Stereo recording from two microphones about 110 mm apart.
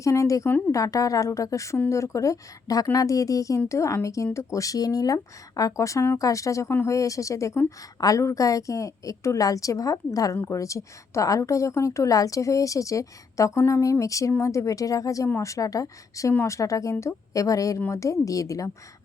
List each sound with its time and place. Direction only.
0.0 s a woman's voice: 30° left (ahead or behind)